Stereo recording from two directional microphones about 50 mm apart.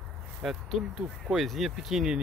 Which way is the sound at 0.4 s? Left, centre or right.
Centre.